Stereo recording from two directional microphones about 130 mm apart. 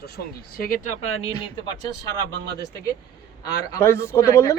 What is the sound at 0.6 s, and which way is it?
Speech, 85° left.